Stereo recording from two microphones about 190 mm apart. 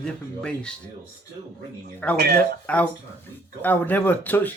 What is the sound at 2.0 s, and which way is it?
Speech, 10° left (ahead or behind).